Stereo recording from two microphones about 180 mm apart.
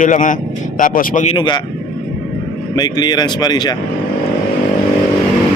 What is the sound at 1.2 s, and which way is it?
Speech, 25° left (ahead or behind).